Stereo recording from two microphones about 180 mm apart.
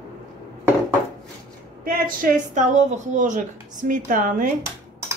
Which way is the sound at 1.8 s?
50° right (ahead or behind).